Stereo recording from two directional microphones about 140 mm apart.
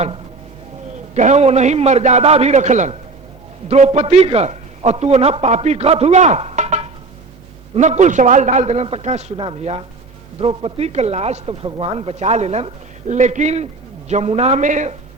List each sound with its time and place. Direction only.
1.1 s a man's voice: 55° right (ahead or behind)